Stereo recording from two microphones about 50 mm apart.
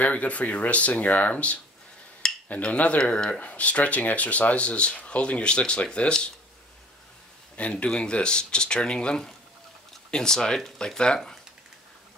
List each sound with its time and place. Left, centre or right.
0.0 s speech: left
7.5 s speech: left; by 11.0 s centre